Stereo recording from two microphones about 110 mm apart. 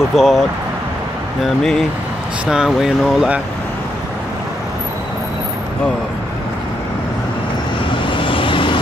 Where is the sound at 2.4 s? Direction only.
5° right (ahead or behind).